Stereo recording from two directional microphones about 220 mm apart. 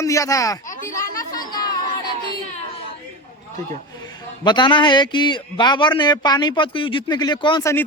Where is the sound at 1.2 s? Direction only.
15° left (ahead or behind).